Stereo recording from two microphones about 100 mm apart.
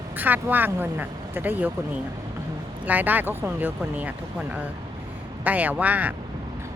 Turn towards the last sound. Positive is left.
turn(degrees=-15)  # may be behind; listen again after turning